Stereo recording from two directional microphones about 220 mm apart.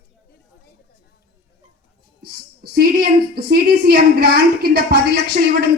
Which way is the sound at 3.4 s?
45° right (ahead or behind).